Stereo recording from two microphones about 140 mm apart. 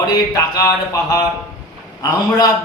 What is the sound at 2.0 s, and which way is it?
Speech, 30° left (ahead or behind).